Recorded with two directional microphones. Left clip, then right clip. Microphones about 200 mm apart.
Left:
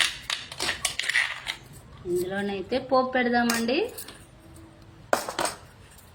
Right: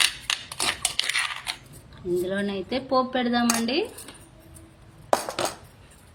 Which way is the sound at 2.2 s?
35° right (ahead or behind).